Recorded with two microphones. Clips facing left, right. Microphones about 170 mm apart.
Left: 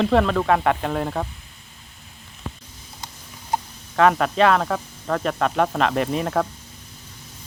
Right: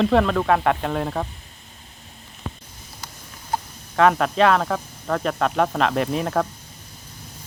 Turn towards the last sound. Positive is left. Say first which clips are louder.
# even
turn(degrees=0)  # may be behind; listen again after turning